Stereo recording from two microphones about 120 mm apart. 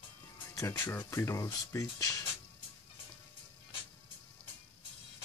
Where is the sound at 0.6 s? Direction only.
25° left (ahead or behind).